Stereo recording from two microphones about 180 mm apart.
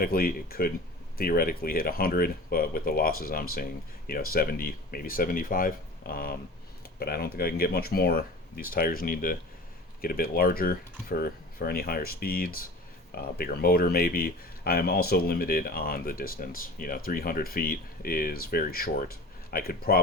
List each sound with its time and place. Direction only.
0.0 s speech: 55° left (ahead or behind)